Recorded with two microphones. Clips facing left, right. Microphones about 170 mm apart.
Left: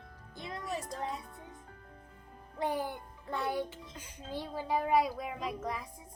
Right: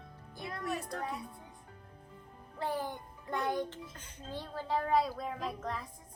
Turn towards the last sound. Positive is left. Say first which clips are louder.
# left 1 dB
turn(degrees=10)  # may be behind; listen again after turning